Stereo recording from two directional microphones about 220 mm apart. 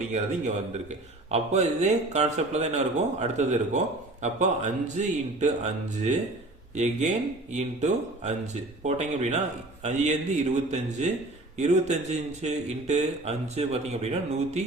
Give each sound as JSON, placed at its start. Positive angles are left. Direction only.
{"t": 0.1, "sound": "a man's voice", "side_deg": -30}